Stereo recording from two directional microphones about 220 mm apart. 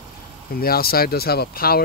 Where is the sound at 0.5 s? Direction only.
45° left (ahead or behind).